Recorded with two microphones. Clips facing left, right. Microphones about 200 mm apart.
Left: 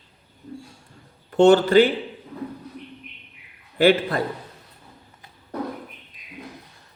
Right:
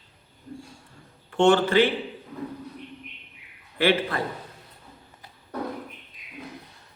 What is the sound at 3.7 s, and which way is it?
Speech, 40° left (ahead or behind).